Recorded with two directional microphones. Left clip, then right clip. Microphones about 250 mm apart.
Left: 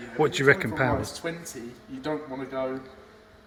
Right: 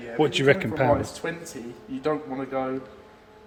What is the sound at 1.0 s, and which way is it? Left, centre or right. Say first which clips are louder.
Speech: right 2 dB; centre.